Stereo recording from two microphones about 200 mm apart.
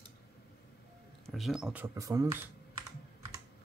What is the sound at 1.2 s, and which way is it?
Speech, centre (ahead or behind).